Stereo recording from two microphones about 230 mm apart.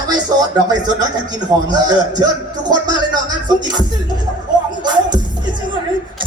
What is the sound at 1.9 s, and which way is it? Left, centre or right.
Speech, centre.